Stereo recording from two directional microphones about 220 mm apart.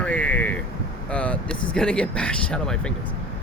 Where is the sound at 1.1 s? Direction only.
5° left (ahead or behind).